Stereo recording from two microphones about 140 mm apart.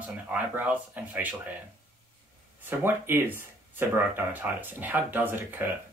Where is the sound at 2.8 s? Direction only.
15° right (ahead or behind).